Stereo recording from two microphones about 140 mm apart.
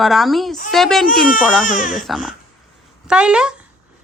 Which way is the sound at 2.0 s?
5° right (ahead or behind).